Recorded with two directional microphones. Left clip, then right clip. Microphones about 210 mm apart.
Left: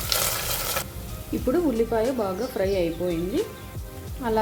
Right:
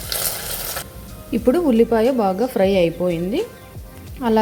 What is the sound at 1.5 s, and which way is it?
A woman's voice, 35° right (ahead or behind).